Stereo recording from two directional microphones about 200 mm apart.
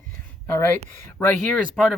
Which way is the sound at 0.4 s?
10° left (ahead or behind).